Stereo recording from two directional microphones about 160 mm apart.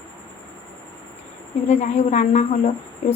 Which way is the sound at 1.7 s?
45° left (ahead or behind).